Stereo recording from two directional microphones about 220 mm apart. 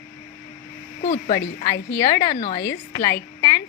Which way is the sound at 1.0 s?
35° left (ahead or behind).